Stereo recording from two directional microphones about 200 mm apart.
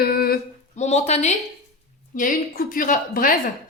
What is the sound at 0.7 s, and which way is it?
Speech, 35° left (ahead or behind).